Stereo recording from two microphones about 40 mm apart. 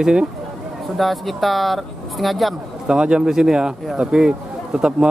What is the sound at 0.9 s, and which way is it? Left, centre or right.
Speech, centre.